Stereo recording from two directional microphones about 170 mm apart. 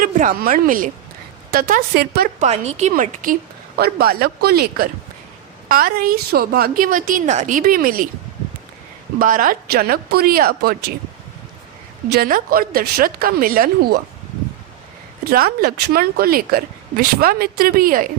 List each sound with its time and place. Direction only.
0.0 s speech: 55° right (ahead or behind)
2.4 s speech: 40° right (ahead or behind)
3.8 s speech: 65° right (ahead or behind)
9.1 s speech: 50° right (ahead or behind)
12.0 s speech: 70° right (ahead or behind)
15.2 s speech: 65° right (ahead or behind)